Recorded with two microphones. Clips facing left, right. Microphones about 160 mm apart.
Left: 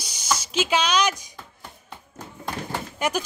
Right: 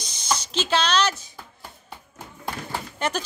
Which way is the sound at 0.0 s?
10° left (ahead or behind).